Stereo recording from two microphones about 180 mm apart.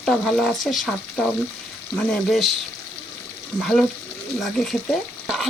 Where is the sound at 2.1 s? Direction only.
Centre (ahead or behind).